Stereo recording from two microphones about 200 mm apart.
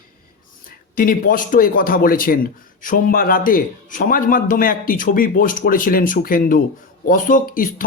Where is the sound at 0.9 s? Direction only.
45° left (ahead or behind).